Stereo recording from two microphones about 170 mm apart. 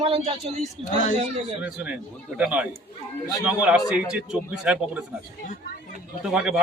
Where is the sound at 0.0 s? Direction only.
35° right (ahead or behind).